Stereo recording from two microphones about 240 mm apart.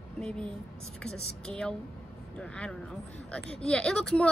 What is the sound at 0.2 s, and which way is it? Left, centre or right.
Speech, centre.